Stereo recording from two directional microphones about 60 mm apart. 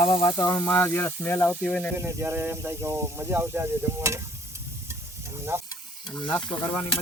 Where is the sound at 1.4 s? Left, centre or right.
Centre.